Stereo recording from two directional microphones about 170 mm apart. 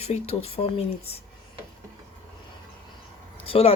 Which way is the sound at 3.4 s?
35° left (ahead or behind).